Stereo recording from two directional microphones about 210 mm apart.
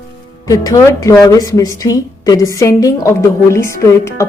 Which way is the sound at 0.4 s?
15° left (ahead or behind).